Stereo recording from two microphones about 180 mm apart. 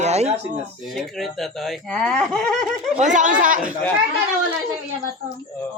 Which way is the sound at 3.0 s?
45° right (ahead or behind).